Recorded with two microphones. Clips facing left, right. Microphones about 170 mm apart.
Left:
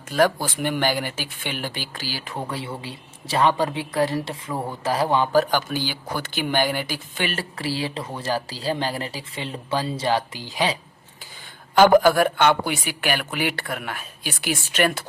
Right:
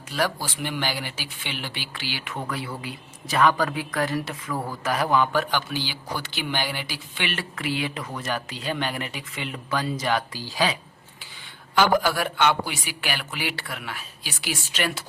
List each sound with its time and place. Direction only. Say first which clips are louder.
0.1 s speech: left 7 dB; 50° left (ahead or behind); by 10.7 s 20° left (ahead or behind)
11.7 s speech: left 7 dB; 50° left (ahead or behind)